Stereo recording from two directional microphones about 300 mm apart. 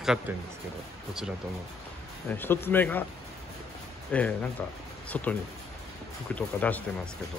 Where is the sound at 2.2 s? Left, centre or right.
Centre.